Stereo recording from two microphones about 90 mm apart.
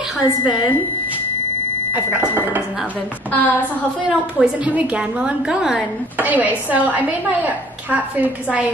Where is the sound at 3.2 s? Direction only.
20° left (ahead or behind).